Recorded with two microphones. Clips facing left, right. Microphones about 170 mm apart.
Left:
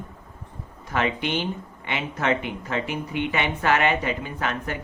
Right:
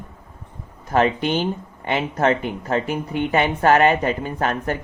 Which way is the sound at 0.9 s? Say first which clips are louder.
Right 6 dB; 40° right (ahead or behind).